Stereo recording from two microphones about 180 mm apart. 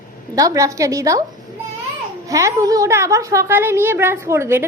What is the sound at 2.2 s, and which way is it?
A woman's voice, 20° right (ahead or behind).